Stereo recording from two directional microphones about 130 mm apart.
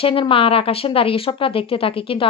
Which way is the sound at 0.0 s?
40° left (ahead or behind).